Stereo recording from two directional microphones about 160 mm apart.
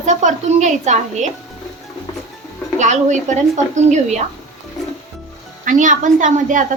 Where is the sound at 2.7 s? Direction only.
45° right (ahead or behind).